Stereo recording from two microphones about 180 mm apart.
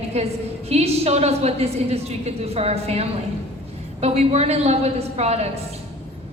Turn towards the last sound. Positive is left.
turn(degrees=-35)  # may be behind; listen again after turning